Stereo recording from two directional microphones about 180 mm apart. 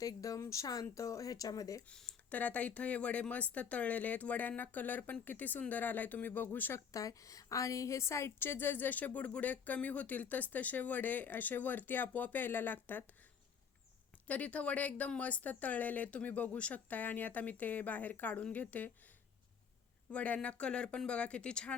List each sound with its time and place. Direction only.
0.0 s speech: 20° left (ahead or behind)
1.9 s speech: 5° left (ahead or behind)
14.3 s speech: 10° left (ahead or behind)
20.1 s speech: 5° left (ahead or behind)